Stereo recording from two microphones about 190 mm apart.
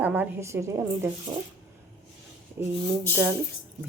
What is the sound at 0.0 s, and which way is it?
Speech, 10° right (ahead or behind).